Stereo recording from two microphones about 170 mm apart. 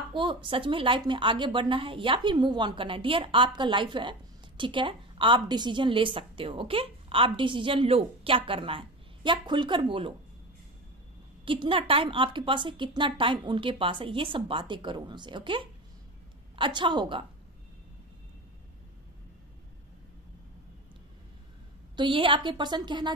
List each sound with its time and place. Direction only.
0.1 s a woman's voice: 30° right (ahead or behind)
11.4 s a woman's voice: 30° right (ahead or behind)
21.9 s a woman's voice: 30° right (ahead or behind)